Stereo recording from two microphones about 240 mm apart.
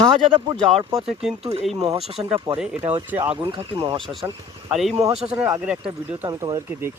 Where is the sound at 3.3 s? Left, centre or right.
Centre.